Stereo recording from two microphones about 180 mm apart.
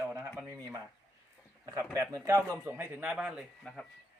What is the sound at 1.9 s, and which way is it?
A man's voice, 15° right (ahead or behind).